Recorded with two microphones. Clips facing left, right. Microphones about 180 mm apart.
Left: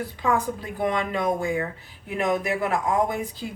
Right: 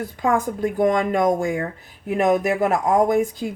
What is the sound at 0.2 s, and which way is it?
Speech, 50° right (ahead or behind).